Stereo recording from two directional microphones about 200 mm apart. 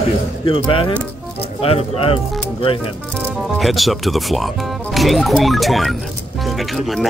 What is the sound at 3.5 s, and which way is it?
Speech, centre (ahead or behind).